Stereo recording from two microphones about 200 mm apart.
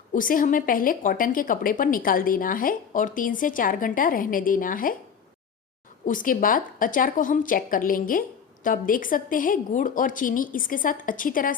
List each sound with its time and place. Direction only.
0.1 s a woman's voice: 45° left (ahead or behind)
6.1 s a woman's voice: 45° left (ahead or behind)